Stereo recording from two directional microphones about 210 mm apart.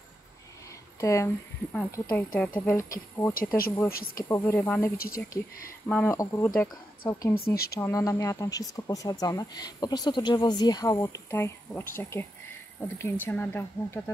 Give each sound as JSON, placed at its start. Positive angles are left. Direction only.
{"t": 1.0, "sound": "speech", "side_deg": 15}
{"t": 3.3, "sound": "speech", "side_deg": 45}
{"t": 4.2, "sound": "speech", "side_deg": 15}
{"t": 4.9, "sound": "speech", "side_deg": 45}
{"t": 5.9, "sound": "speech", "side_deg": 10}
{"t": 7.3, "sound": "speech", "side_deg": 45}
{"t": 7.8, "sound": "speech", "side_deg": 15}